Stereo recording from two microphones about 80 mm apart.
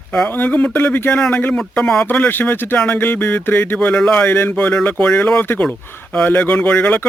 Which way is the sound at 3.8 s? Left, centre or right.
Centre.